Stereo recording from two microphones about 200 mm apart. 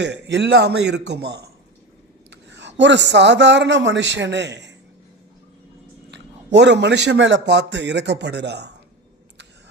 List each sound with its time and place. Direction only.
0.0 s a man's voice: 60° right (ahead or behind)
6.1 s a man's voice: 60° right (ahead or behind)